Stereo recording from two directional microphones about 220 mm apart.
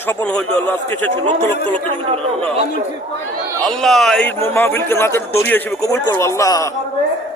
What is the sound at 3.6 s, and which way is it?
A man's voice, centre (ahead or behind).